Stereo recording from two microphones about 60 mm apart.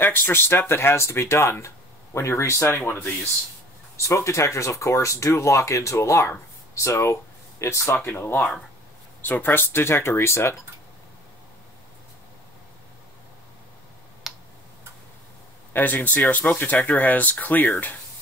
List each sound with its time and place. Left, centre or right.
0.0 s speech: left
7.9 s speech: left
14.2 s tick: centre
15.7 s speech: left